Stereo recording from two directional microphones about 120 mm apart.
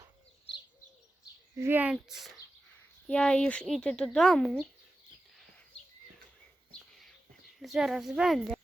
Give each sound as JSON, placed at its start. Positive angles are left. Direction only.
{"t": 1.5, "sound": "speech", "side_deg": -20}
{"t": 2.0, "sound": "speech", "side_deg": -5}
{"t": 3.1, "sound": "speech", "side_deg": 5}
{"t": 7.6, "sound": "speech", "side_deg": -5}